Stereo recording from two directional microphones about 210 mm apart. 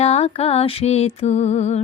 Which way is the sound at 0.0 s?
30° left (ahead or behind).